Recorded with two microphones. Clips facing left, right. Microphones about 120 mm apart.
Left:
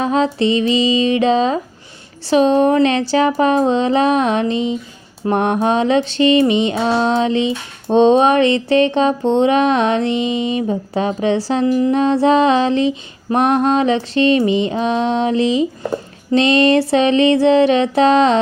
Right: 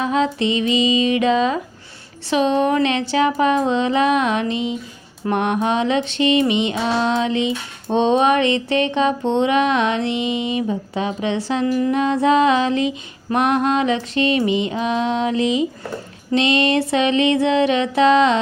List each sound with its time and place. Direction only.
0.0 s mantra: 35° left (ahead or behind)